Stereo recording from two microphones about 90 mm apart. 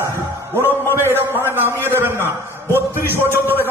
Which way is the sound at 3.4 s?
25° left (ahead or behind).